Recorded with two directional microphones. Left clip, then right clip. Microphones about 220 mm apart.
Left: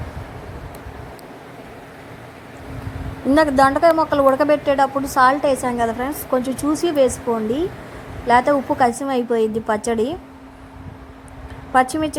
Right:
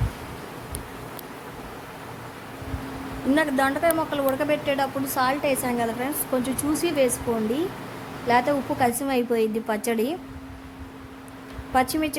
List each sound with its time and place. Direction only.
3.3 s a woman's voice: 20° left (ahead or behind)
8.3 s a woman's voice: 15° left (ahead or behind)
11.7 s a woman's voice: 15° left (ahead or behind)